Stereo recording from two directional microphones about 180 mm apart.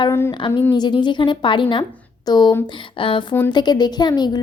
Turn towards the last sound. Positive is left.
turn(degrees=25)  # may be behind; listen again after turning